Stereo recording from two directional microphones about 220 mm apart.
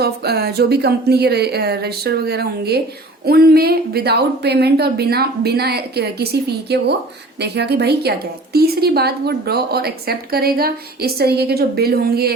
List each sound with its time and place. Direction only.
0.0 s a woman's voice: 45° right (ahead or behind)